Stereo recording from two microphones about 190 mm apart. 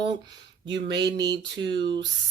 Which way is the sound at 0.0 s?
25° right (ahead or behind).